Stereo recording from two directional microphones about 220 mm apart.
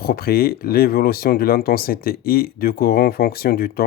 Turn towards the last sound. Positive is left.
turn(degrees=45)  # may be behind; listen again after turning